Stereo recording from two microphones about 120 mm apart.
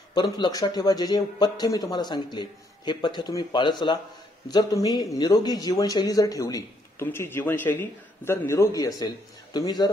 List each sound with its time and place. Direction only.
0.1 s speech: 35° left (ahead or behind)